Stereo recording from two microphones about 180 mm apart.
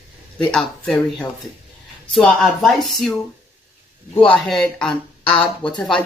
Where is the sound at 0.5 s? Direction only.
5° left (ahead or behind).